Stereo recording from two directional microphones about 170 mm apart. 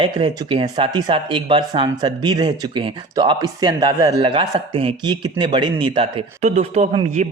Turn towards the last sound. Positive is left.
turn(degrees=-40)  # may be behind; listen again after turning